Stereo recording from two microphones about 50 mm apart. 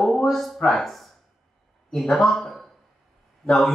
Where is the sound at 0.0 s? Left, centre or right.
Centre.